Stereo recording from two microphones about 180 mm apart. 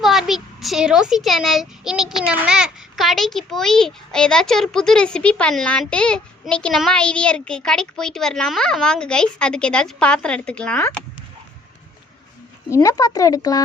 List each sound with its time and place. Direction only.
0.0 s a child's voice: centre (ahead or behind)
12.7 s speech: 20° left (ahead or behind)